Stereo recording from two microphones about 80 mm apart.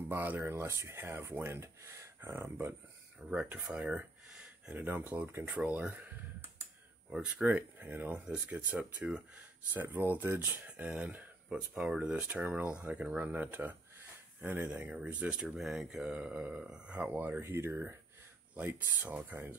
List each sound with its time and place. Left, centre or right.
0.1 s speech: right
3.2 s speech: centre
3.8 s a sound: centre
4.8 s speech: right
5.4 s speech: centre
7.4 s speech: right
11.4 s speech: centre
15.4 s speech: centre; by 19.5 s right